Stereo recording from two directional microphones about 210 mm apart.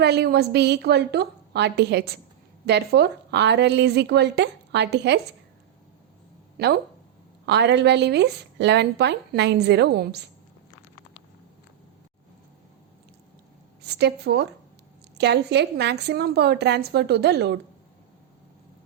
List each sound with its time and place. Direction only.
0.0 s a woman's voice: 50° right (ahead or behind)
7.4 s a woman's voice: 55° right (ahead or behind)
13.8 s a woman's voice: 50° right (ahead or behind)